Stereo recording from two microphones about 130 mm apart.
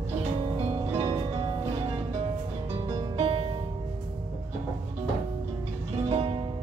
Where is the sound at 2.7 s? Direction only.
40° right (ahead or behind).